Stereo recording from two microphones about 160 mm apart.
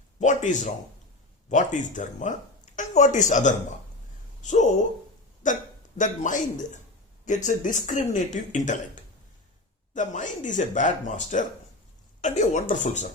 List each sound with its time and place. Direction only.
0.2 s a sound: 50° left (ahead or behind)
1.5 s speech: 50° left (ahead or behind)
6.0 s speech: 50° left (ahead or behind)